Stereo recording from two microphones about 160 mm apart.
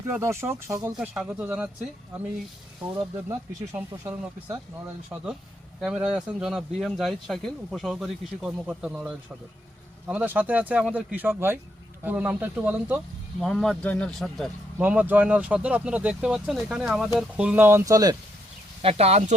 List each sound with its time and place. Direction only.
0.1 s speech: 15° right (ahead or behind)
0.9 s speech: 5° right (ahead or behind)
3.2 s speech: 15° right (ahead or behind)
5.8 s speech: 5° right (ahead or behind)
13.4 s speech: 5° left (ahead or behind)
14.8 s speech: 10° right (ahead or behind)
18.8 s speech: 40° right (ahead or behind)